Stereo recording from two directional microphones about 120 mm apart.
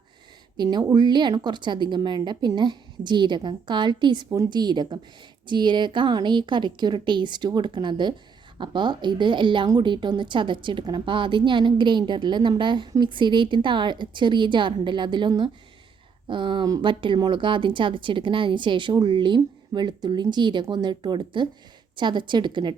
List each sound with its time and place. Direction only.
0.5 s a woman's voice: 35° right (ahead or behind)